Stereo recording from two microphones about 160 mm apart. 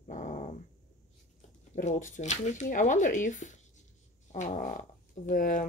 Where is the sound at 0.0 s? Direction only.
50° left (ahead or behind).